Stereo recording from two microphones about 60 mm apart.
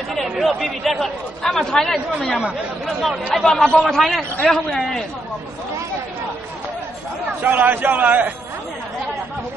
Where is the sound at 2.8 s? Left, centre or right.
Centre.